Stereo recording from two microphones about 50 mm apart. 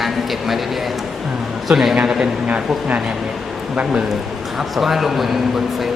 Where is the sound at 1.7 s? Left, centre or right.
Centre.